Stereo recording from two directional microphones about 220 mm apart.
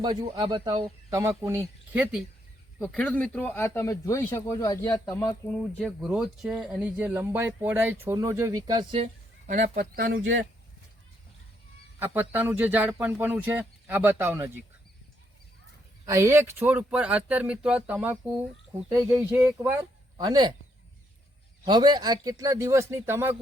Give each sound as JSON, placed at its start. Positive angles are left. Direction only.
{"t": 0.0, "sound": "speech", "side_deg": -20}
{"t": 2.8, "sound": "speech", "side_deg": 5}
{"t": 9.5, "sound": "speech", "side_deg": -40}
{"t": 11.9, "sound": "speech", "side_deg": -10}
{"t": 16.0, "sound": "speech", "side_deg": -15}
{"t": 21.6, "sound": "speech", "side_deg": -20}